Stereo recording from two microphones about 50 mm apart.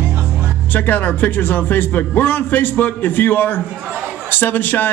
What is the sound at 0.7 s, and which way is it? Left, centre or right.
A man's voice, left.